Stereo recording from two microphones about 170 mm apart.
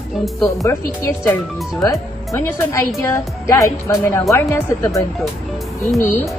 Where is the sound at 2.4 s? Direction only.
15° left (ahead or behind).